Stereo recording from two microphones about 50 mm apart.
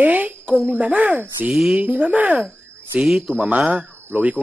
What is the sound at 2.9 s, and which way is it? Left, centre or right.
Speech, centre.